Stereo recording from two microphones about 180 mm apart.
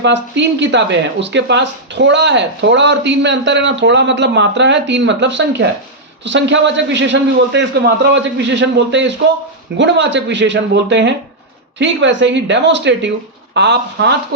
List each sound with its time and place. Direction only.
0.0 s speech: 80° right